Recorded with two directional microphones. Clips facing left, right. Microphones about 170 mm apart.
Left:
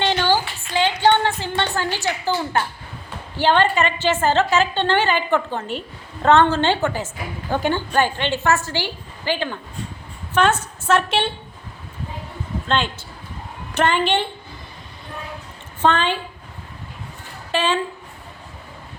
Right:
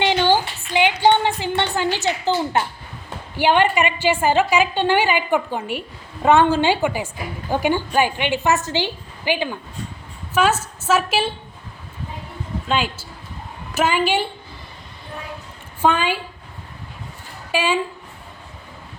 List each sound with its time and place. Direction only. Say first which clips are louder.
0.0 s a sound: right 2 dB; 15° right (ahead or behind)
3.3 s a woman's voice: right 1 dB; 15° right (ahead or behind)
12.6 s a woman's voice: even; 5° right (ahead or behind)
15.8 s a woman's voice: even; 10° right (ahead or behind)
17.5 s a woman's voice: even; 10° right (ahead or behind)